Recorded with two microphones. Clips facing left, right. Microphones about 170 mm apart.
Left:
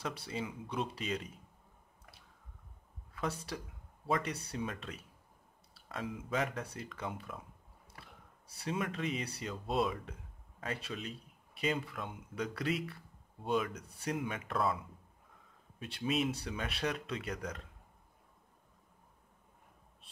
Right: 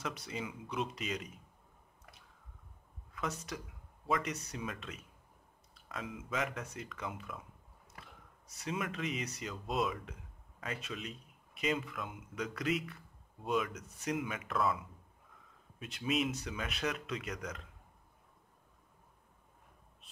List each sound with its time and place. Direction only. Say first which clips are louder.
0.0 s a man's voice: left 1 dB; 30° left (ahead or behind)
3.2 s a man's voice: left 1 dB; 30° left (ahead or behind)
8.5 s a man's voice: left 2 dB; 30° left (ahead or behind)
15.8 s a man's voice: even; 30° left (ahead or behind)